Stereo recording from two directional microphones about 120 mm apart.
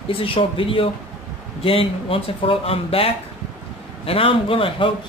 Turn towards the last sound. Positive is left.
turn(degrees=50)  # may be behind; listen again after turning